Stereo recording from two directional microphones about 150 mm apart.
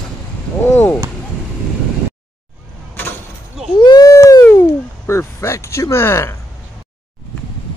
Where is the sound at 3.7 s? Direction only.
30° left (ahead or behind).